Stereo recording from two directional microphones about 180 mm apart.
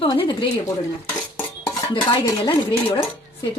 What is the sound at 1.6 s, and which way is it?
Stir, 20° left (ahead or behind).